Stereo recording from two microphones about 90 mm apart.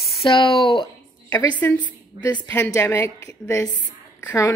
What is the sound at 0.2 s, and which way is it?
Speech, 75° left (ahead or behind).